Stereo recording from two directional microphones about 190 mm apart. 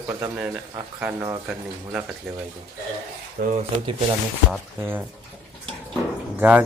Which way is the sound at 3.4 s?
45° right (ahead or behind).